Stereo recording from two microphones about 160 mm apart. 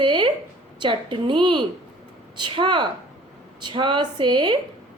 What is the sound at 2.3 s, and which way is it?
A woman's voice, 30° right (ahead or behind).